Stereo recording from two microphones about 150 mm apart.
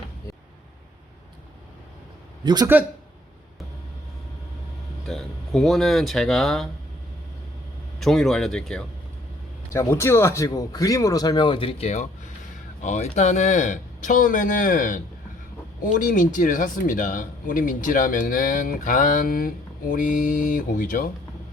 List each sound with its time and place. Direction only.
2.4 s a man's voice: 30° right (ahead or behind)
5.0 s speech: centre (ahead or behind)
7.9 s speech: centre (ahead or behind)
9.7 s speech: 20° left (ahead or behind); by 21.1 s 65° left (ahead or behind)